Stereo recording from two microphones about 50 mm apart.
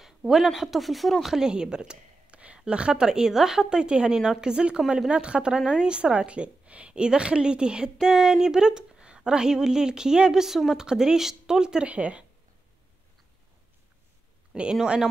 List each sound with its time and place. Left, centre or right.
0.0 s a sound: centre
0.5 s a woman's voice: centre
5.9 s a woman's voice: right
11.9 s speech: right
14.5 s speech: centre